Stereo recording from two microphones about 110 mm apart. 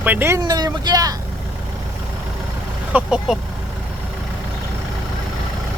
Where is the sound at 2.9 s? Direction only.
10° right (ahead or behind).